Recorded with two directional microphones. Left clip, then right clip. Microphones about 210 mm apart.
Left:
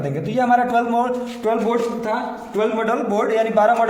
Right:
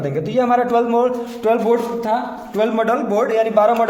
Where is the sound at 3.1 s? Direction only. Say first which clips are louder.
Right 1 dB; 25° right (ahead or behind).